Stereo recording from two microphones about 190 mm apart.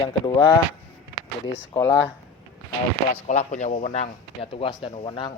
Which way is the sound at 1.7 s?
15° left (ahead or behind).